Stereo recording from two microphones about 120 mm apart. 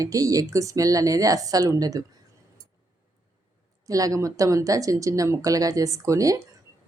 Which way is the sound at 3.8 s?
30° right (ahead or behind).